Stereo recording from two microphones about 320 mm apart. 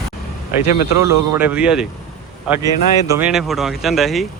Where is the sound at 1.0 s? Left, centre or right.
Centre.